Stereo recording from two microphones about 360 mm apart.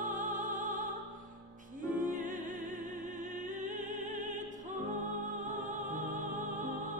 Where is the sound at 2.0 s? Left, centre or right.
Right.